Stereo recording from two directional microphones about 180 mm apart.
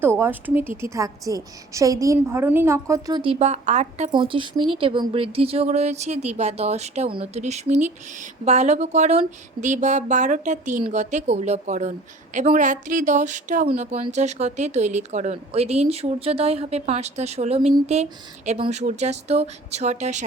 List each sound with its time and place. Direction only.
0.0 s a woman's voice: 15° right (ahead or behind); by 4.1 s 40° right (ahead or behind)
4.1 s a woman's voice: 25° right (ahead or behind)